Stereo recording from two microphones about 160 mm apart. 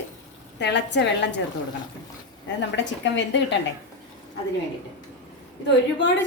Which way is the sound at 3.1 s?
90° left.